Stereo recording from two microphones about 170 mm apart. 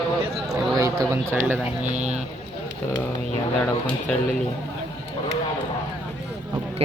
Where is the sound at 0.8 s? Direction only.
15° right (ahead or behind).